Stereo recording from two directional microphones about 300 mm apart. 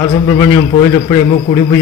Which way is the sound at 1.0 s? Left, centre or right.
Centre.